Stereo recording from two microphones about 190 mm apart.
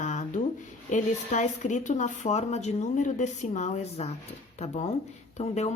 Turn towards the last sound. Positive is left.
turn(degrees=35)  # may be behind; listen again after turning